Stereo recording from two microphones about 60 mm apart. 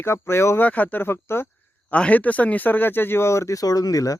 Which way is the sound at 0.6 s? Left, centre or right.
Left.